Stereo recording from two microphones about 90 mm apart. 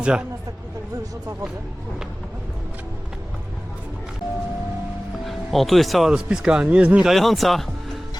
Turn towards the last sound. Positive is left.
turn(degrees=0)  # may be behind; listen again after turning